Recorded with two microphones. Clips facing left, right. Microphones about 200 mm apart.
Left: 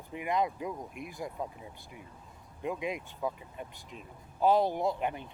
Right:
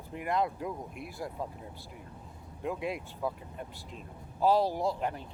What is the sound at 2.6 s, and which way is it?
Speech, centre (ahead or behind).